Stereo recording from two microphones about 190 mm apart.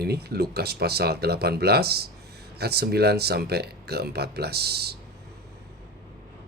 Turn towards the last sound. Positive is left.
turn(degrees=-55)  # may be behind; listen again after turning